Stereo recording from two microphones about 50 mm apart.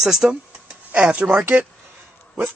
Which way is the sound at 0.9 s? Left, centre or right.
Right.